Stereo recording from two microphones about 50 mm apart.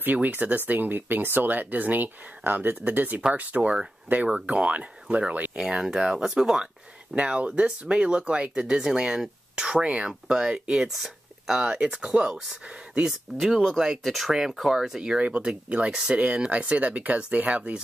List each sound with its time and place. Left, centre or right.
0.0 s speech: right
3.5 s speech: centre
4.1 s speech: right
5.6 s speech: centre
10.3 s speech: centre
10.9 s a sound: centre
11.6 s speech: right
11.9 s speech: centre
13.4 s speech: centre
15.2 s speech: right